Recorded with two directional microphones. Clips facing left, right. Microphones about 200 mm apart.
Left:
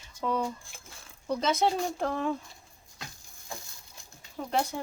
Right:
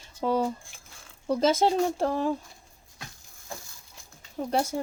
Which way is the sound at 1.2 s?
45° right (ahead or behind).